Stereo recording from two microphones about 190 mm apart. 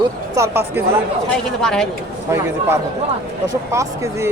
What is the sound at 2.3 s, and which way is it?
A man's voice, 15° right (ahead or behind).